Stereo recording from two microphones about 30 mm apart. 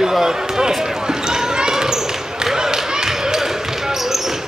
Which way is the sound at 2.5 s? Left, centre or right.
Right.